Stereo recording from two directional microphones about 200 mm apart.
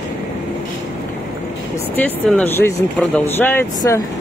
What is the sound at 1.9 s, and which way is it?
Speech, 10° left (ahead or behind).